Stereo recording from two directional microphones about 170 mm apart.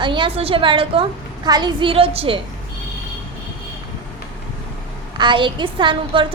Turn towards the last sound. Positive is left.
turn(degrees=-30)  # may be behind; listen again after turning